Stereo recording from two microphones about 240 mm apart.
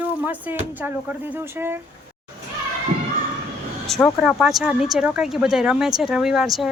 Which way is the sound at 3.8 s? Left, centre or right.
Centre.